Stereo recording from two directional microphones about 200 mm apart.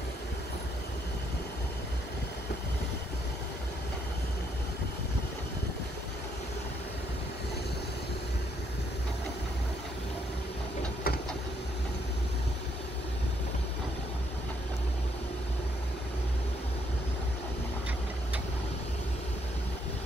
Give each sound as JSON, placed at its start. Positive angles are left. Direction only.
{"t": 11.1, "sound": "vehicle", "side_deg": 50}